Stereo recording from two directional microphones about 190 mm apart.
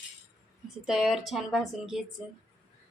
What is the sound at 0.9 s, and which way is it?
Speech, 5° right (ahead or behind).